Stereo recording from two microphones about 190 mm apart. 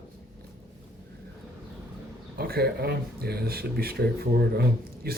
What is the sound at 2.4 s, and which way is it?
Speech, 55° right (ahead or behind).